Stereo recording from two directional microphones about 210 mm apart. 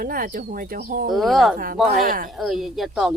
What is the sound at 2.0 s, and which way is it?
Speech, 40° right (ahead or behind).